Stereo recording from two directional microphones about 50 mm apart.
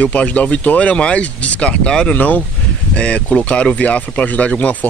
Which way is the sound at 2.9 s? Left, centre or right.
Left.